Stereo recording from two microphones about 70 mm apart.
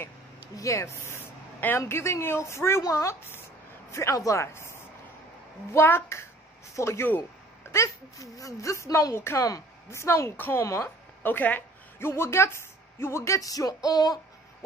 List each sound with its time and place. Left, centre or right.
0.6 s a woman's voice: left
10.3 s a woman's voice: left
10.6 s speech: left
11.2 s a woman's voice: left
12.1 s speech: left
13.8 s speech: left